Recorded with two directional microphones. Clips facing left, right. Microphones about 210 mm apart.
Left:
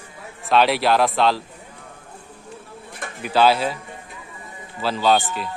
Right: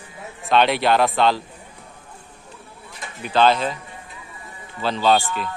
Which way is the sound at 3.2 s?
5° left (ahead or behind).